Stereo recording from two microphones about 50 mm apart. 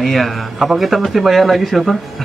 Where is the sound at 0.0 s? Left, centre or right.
Centre.